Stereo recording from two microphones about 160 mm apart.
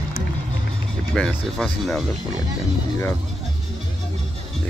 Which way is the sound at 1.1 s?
Centre (ahead or behind).